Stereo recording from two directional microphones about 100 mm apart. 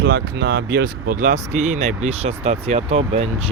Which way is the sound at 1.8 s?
90° right.